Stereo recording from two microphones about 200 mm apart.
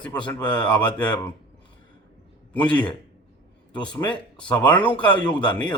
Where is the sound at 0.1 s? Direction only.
20° left (ahead or behind).